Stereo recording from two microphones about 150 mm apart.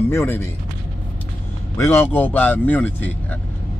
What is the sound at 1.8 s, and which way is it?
Speech, 15° left (ahead or behind).